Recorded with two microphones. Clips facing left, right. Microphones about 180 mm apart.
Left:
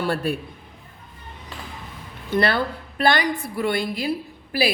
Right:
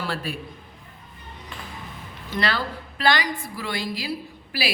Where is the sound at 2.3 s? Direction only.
55° left (ahead or behind).